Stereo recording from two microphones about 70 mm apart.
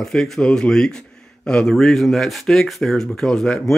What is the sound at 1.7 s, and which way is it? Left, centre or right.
Speech, centre.